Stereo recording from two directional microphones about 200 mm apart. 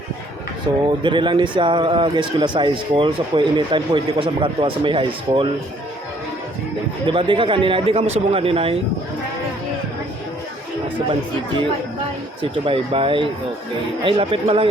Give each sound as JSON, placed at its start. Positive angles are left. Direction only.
{"t": 0.7, "sound": "a man's voice", "side_deg": -20}
{"t": 7.1, "sound": "a man's voice", "side_deg": -25}
{"t": 12.4, "sound": "a man's voice", "side_deg": -25}